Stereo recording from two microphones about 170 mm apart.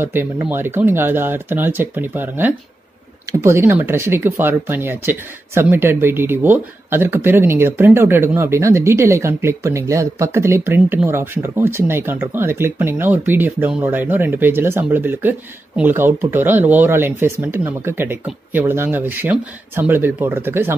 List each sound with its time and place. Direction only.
0.0 s speech: 10° right (ahead or behind)